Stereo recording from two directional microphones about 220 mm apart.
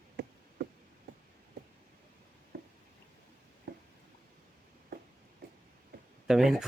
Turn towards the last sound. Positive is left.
turn(degrees=0)  # may be behind; listen again after turning